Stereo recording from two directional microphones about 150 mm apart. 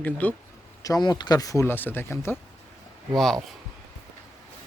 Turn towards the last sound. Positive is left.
turn(degrees=0)  # may be behind; listen again after turning